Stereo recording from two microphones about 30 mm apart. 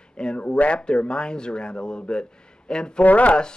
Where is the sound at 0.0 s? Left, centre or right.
Left.